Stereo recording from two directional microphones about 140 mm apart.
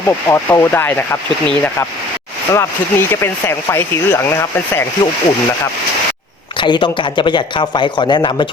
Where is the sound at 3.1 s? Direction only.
15° left (ahead or behind).